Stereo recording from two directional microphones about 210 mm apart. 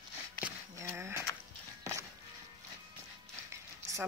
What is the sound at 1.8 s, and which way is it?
Walk, 15° right (ahead or behind).